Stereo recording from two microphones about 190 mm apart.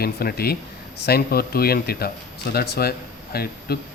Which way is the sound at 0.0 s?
55° left (ahead or behind).